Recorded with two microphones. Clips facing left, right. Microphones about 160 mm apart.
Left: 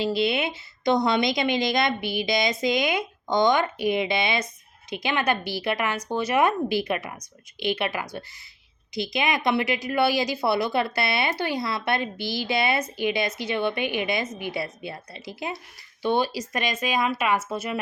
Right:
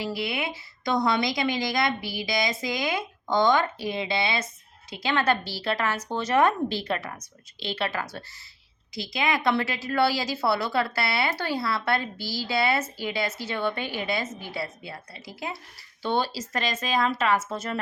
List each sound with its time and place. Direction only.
0.0 s a woman's voice: 25° left (ahead or behind)